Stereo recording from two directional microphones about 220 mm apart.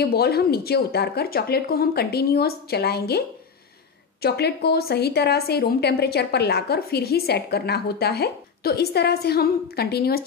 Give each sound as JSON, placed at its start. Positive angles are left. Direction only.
{"t": 0.0, "sound": "a woman's voice", "side_deg": 45}